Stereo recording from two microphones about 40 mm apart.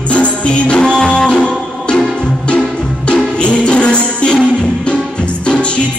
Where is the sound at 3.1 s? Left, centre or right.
Left.